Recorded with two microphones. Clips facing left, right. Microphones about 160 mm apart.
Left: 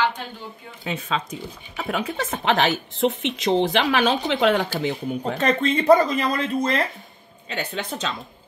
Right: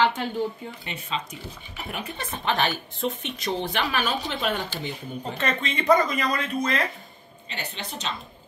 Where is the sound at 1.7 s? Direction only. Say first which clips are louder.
Left 9 dB; 90° left.